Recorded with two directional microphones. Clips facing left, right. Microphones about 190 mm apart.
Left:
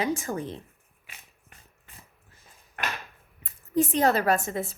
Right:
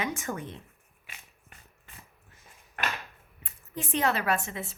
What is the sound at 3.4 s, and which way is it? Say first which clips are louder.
Speech: left 14 dB; 40° left (ahead or behind).